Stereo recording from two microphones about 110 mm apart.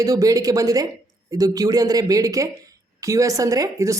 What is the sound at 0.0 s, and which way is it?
Speech, 30° right (ahead or behind).